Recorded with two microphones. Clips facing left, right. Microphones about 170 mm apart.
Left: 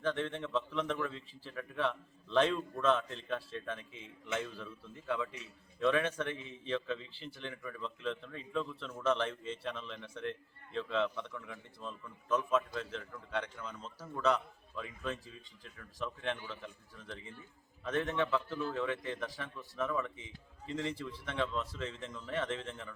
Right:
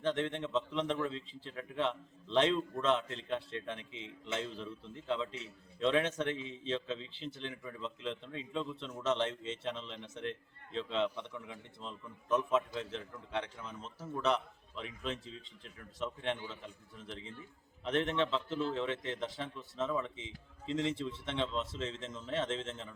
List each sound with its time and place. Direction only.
0.0 s a man's voice: 20° right (ahead or behind)
3.8 s a man's voice: 75° right (ahead or behind)
4.3 s a man's voice: 20° right (ahead or behind)